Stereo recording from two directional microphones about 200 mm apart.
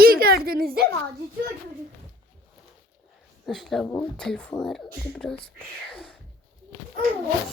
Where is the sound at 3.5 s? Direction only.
Centre (ahead or behind).